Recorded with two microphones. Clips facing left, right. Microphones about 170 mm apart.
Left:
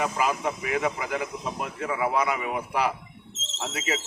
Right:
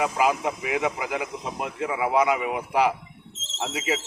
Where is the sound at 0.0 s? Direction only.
10° right (ahead or behind).